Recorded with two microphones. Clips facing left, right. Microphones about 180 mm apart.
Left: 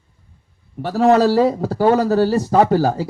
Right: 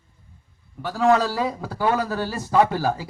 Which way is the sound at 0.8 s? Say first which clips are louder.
Left 6 dB; 35° left (ahead or behind).